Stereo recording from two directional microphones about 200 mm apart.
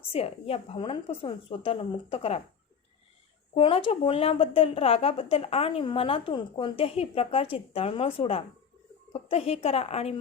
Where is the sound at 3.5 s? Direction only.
25° left (ahead or behind).